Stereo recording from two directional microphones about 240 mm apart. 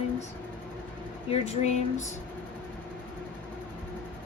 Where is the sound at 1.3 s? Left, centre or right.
Left.